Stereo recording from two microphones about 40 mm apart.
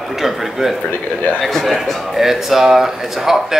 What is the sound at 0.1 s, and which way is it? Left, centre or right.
Speech, centre.